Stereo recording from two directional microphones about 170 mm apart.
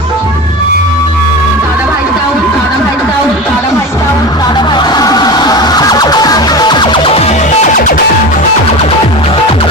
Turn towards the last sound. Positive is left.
turn(degrees=50)  # may be behind; listen again after turning